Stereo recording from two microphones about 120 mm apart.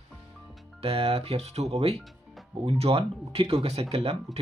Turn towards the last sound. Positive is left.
turn(degrees=-55)  # may be behind; listen again after turning